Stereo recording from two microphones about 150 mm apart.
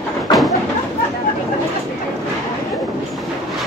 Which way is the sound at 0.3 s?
Centre (ahead or behind).